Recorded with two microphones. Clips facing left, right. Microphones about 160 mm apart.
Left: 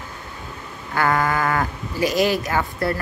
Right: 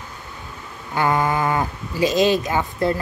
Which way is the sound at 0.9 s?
20° right (ahead or behind).